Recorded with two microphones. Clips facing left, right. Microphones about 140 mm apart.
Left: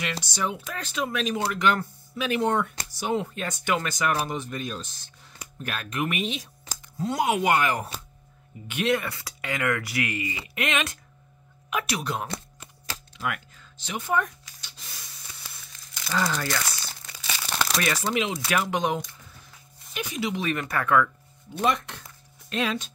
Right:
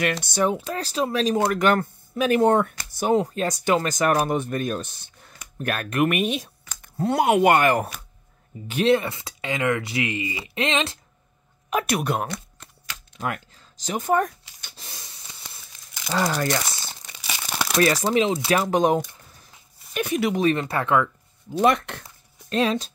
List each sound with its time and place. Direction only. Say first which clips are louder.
0.0 s speech: right 7 dB; 55° right (ahead or behind)
0.7 s speech: right 5 dB; 35° right (ahead or behind); by 7.9 s 60° right (ahead or behind)
8.6 s speech: right 6 dB; 30° right (ahead or behind)
11.7 s speech: right 5 dB; 50° right (ahead or behind)
13.2 s speech: right 3 dB; 40° right (ahead or behind)
14.8 s spray: right 4 dB; 30° right (ahead or behind)
16.1 s speech: right 3 dB; 35° right (ahead or behind)
16.4 s crumpling: right 4 dB; 25° right (ahead or behind)
17.7 s speech: right 9 dB; 35° right (ahead or behind)
18.6 s speech: right 6 dB; 40° right (ahead or behind)
19.9 s speech: right 7 dB; 55° right (ahead or behind)
20.3 s speech: right 6 dB; 30° right (ahead or behind)
21.5 s speech: right 6 dB; 60° right (ahead or behind)
22.5 s speech: right 6 dB; 35° right (ahead or behind)